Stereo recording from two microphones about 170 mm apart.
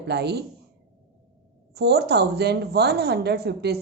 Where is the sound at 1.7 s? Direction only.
70° right (ahead or behind).